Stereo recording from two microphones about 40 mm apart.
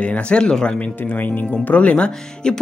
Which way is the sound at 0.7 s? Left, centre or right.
Left.